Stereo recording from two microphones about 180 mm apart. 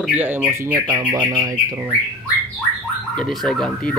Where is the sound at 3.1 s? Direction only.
Centre (ahead or behind).